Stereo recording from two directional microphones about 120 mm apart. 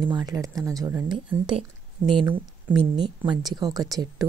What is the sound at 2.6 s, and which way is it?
Speech, 40° right (ahead or behind).